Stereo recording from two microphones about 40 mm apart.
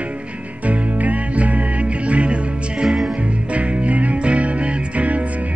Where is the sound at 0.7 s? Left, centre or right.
Right.